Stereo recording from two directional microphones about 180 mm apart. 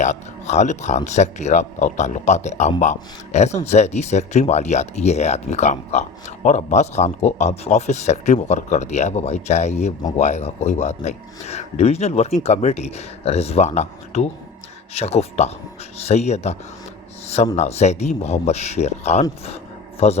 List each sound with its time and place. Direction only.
0.0 s speech: 40° left (ahead or behind)